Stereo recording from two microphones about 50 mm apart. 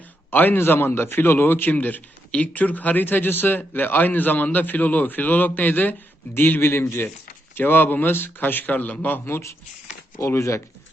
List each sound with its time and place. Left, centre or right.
0.3 s speech: left
0.6 s a man's voice: left
1.7 s a man's voice: left
10.2 s speech: left